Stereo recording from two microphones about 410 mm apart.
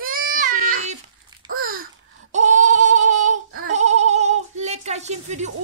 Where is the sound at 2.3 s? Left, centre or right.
Centre.